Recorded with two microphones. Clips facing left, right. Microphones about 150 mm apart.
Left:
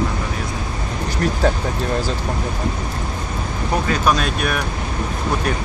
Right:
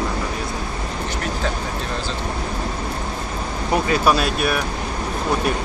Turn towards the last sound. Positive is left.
turn(degrees=-5)  # may be behind; listen again after turning